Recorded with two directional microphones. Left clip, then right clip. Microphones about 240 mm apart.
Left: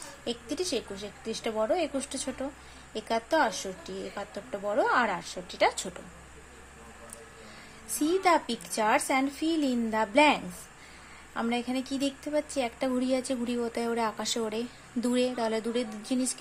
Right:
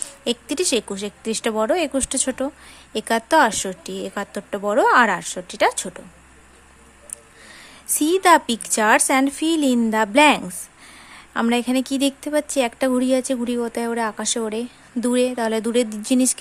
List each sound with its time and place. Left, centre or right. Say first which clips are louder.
0.3 s speech: right 11 dB; right
8.0 s a woman's voice: right 10 dB; right